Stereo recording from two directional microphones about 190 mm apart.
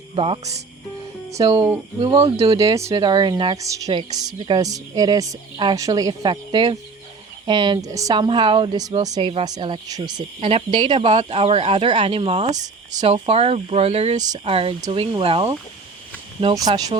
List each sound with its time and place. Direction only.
0.2 s speech: 35° right (ahead or behind)
2.6 s speech: 15° right (ahead or behind)